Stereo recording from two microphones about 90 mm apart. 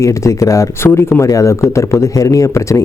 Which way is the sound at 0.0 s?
35° left (ahead or behind).